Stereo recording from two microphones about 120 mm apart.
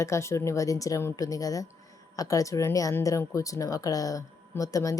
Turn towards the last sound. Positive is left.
turn(degrees=30)  # may be behind; listen again after turning